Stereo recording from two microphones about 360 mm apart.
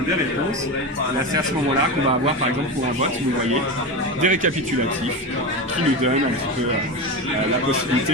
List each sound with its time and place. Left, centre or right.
4.2 s speech: right